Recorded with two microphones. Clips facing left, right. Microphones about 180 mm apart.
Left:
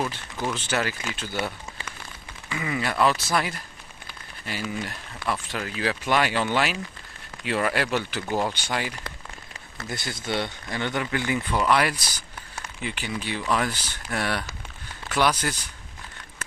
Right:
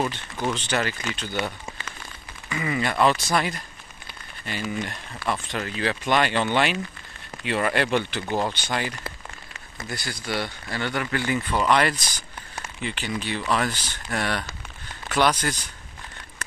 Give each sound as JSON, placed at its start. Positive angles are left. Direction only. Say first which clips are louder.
{"t": 0.1, "sound": "speech", "louder": "right 2 dB", "side_deg": 5}
{"t": 9.8, "sound": "speech", "louder": "left 1 dB", "side_deg": 20}